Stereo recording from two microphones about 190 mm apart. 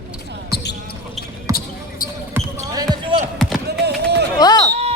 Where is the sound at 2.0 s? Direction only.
45° left (ahead or behind).